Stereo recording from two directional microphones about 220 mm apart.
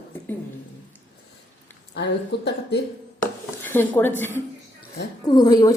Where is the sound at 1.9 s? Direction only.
50° left (ahead or behind).